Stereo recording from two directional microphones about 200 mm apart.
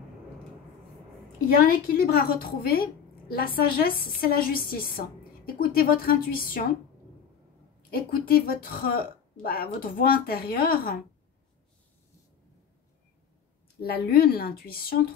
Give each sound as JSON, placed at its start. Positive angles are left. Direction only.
{"t": 2.0, "sound": "speech", "side_deg": 50}
{"t": 7.9, "sound": "speech", "side_deg": 50}
{"t": 13.8, "sound": "speech", "side_deg": 50}